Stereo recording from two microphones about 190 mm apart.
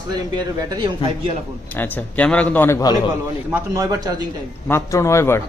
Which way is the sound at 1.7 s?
10° left (ahead or behind).